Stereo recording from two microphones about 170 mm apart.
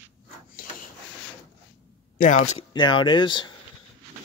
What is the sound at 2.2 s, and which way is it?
Speech, 50° left (ahead or behind).